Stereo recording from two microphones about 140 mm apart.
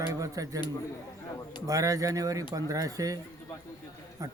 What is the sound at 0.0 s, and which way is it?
Speech, 25° right (ahead or behind).